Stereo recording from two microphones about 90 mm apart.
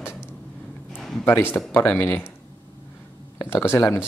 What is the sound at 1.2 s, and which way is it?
Speech, 20° left (ahead or behind).